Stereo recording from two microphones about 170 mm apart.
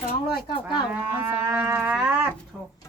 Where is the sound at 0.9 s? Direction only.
5° right (ahead or behind).